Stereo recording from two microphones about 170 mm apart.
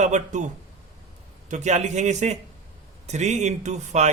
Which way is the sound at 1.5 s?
45° right (ahead or behind).